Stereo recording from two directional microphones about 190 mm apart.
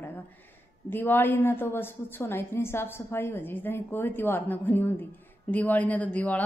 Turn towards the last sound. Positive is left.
turn(degrees=10)  # may be behind; listen again after turning